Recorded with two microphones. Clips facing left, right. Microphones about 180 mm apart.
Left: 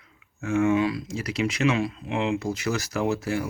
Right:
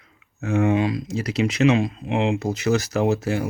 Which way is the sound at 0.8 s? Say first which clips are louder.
Right 2 dB; 20° right (ahead or behind).